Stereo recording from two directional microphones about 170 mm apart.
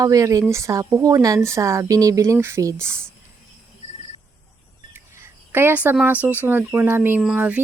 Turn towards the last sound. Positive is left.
turn(degrees=-10)  # may be behind; listen again after turning